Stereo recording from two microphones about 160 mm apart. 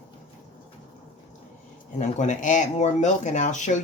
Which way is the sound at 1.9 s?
45° left (ahead or behind).